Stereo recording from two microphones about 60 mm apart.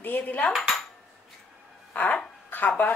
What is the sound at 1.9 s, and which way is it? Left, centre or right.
Dog, left.